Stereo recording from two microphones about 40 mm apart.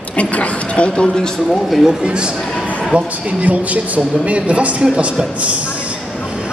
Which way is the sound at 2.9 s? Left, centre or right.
Right.